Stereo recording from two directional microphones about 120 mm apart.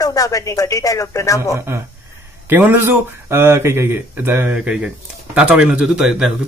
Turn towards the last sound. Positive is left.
turn(degrees=-5)  # may be behind; listen again after turning